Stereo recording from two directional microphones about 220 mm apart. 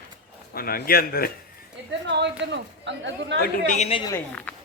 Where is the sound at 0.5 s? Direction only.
40° left (ahead or behind).